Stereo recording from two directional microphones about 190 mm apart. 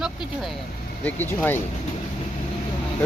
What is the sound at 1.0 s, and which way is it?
Speech, 10° left (ahead or behind).